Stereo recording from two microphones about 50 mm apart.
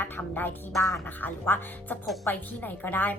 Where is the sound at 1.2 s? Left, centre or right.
Left.